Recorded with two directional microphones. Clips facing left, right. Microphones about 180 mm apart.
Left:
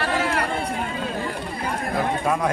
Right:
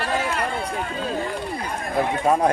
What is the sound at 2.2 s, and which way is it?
Speech, 35° right (ahead or behind).